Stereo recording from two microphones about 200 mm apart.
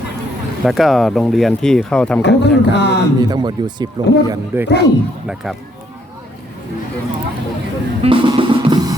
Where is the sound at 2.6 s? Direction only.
60° left (ahead or behind).